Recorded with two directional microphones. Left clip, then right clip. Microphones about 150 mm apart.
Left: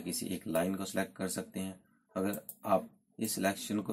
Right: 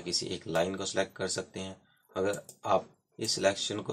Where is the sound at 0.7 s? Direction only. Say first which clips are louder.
Right 4 dB; 35° left (ahead or behind).